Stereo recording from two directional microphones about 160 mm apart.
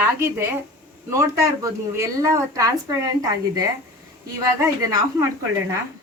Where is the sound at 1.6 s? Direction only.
20° right (ahead or behind).